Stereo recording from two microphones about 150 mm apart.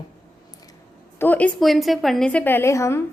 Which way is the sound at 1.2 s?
10° left (ahead or behind).